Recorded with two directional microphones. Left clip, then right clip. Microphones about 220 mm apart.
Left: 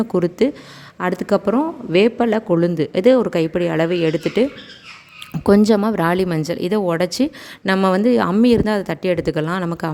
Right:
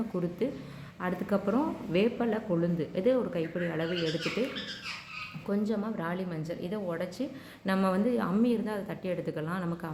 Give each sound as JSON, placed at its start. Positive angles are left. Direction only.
{"t": 0.1, "sound": "a woman's voice", "side_deg": 50}
{"t": 5.5, "sound": "a woman's voice", "side_deg": 55}